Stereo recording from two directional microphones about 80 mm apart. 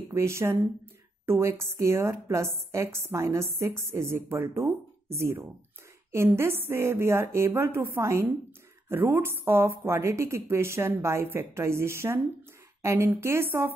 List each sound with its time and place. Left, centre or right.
0.1 s a woman's voice: right